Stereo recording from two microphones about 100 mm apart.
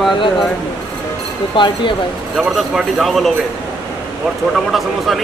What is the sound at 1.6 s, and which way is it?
Speech, 55° left (ahead or behind).